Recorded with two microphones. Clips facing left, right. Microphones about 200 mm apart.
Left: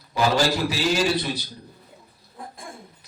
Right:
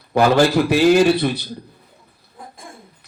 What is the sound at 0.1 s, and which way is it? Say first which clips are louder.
A man's voice: right 7 dB; 60° right (ahead or behind).